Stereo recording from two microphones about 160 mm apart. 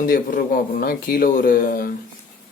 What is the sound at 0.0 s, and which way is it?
Speech, 60° left (ahead or behind).